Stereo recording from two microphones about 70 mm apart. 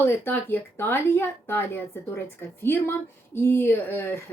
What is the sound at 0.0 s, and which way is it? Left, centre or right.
Speech, left.